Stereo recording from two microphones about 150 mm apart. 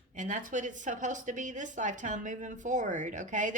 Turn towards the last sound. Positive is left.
turn(degrees=-55)  # may be behind; listen again after turning